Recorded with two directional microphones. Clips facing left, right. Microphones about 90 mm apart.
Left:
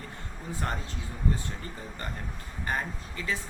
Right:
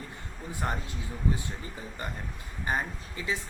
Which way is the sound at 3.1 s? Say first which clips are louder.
Even; 15° right (ahead or behind).